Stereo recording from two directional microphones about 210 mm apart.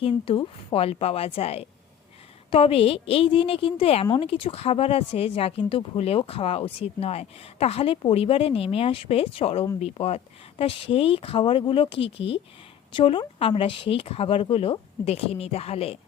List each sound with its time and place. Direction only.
0.0 s a woman's voice: 25° left (ahead or behind)